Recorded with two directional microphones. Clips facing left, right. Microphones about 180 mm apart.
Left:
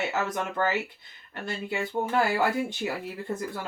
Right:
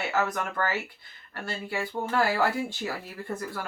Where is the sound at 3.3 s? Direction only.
20° left (ahead or behind).